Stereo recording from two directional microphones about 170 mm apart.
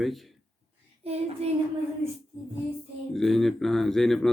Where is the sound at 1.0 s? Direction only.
35° right (ahead or behind).